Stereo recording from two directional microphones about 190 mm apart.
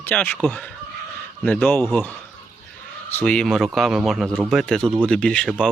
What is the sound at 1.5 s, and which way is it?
Speech, 10° left (ahead or behind).